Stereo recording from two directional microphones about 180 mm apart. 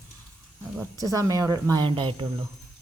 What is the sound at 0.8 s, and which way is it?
Speech, 20° right (ahead or behind).